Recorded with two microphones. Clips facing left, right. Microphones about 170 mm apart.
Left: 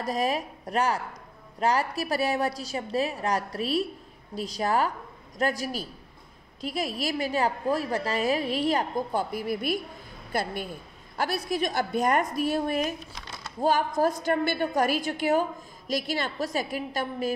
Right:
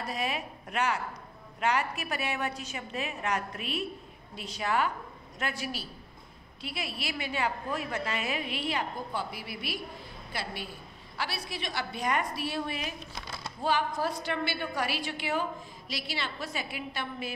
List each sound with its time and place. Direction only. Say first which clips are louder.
0.0 s a woman's voice: left 6 dB; 40° left (ahead or behind)